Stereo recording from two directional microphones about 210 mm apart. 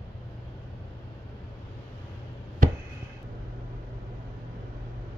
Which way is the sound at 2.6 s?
40° right (ahead or behind).